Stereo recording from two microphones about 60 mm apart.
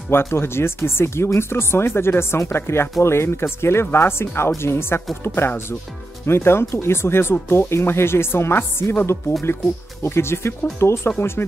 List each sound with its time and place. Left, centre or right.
0.1 s speech: left